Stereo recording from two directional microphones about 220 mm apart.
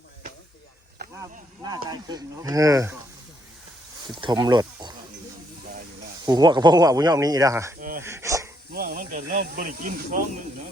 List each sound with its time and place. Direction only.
1.2 s speech: 15° right (ahead or behind)
4.1 s speech: 20° right (ahead or behind)
6.2 s speech: 20° right (ahead or behind)
7.8 s a sound: 40° right (ahead or behind)
8.0 s a sound: 15° right (ahead or behind)
8.7 s speech: 45° right (ahead or behind)